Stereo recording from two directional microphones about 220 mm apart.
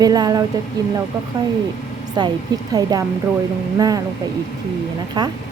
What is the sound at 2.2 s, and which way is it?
A woman's voice, 20° right (ahead or behind).